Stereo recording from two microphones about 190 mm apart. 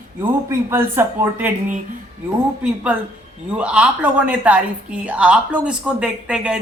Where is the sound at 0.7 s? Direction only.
15° right (ahead or behind).